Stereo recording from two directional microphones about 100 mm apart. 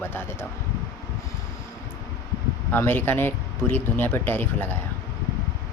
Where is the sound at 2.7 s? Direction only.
20° left (ahead or behind).